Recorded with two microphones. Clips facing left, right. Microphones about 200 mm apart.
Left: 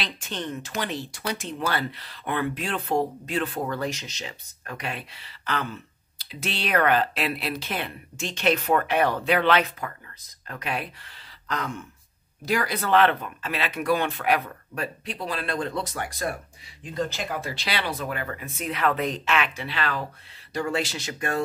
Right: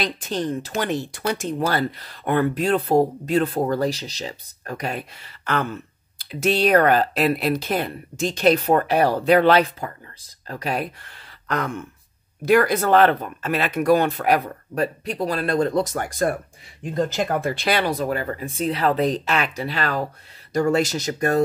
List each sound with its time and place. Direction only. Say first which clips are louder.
0.0 s speech: right 8 dB; 35° right (ahead or behind)
11.4 s a sound: right 5 dB; 55° right (ahead or behind)
12.4 s speech: right 8 dB; 50° right (ahead or behind)